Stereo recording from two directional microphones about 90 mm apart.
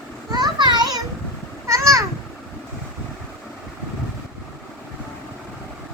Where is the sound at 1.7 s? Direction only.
35° right (ahead or behind).